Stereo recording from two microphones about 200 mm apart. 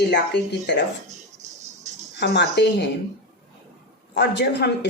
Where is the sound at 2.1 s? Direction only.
60° left (ahead or behind).